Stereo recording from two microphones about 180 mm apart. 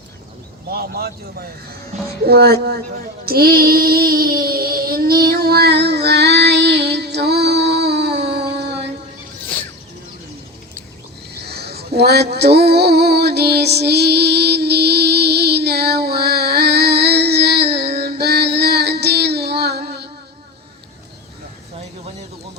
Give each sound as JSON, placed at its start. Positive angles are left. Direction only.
{"t": 0.7, "sound": "speech", "side_deg": -60}
{"t": 3.2, "sound": "child singing", "side_deg": -55}
{"t": 11.4, "sound": "a sound", "side_deg": -65}